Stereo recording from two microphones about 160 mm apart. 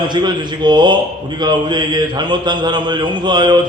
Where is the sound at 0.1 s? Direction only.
30° right (ahead or behind).